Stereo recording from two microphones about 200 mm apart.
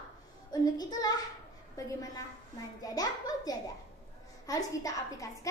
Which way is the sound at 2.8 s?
20° left (ahead or behind).